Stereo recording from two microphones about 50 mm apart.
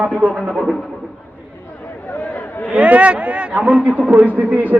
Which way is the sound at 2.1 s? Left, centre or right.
Left.